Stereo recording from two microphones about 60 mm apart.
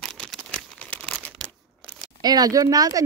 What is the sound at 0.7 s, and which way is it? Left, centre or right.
Crumpling, left.